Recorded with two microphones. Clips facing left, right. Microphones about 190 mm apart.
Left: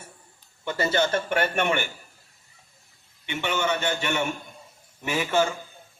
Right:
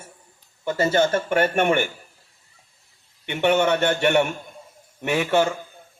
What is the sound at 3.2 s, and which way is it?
A man's voice, 60° right (ahead or behind).